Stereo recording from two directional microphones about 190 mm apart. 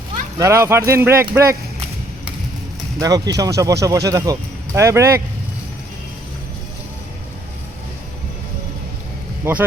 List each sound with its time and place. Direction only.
0.3 s speech: 15° right (ahead or behind)
3.0 s speech: 20° right (ahead or behind)
9.4 s speech: 10° right (ahead or behind)